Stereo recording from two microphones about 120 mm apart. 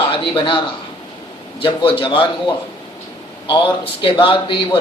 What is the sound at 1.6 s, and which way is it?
Speech, 45° left (ahead or behind).